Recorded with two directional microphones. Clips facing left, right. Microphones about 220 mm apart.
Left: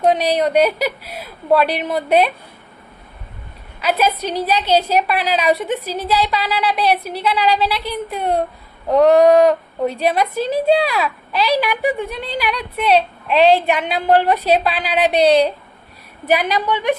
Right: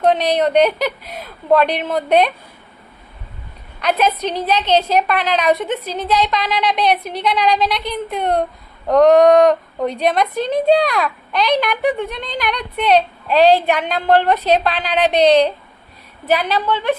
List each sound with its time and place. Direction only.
0.0 s a woman's voice: 10° left (ahead or behind)
3.8 s a woman's voice: 5° left (ahead or behind)
13.3 s a woman's voice: 40° right (ahead or behind)
13.7 s a woman's voice: 10° left (ahead or behind)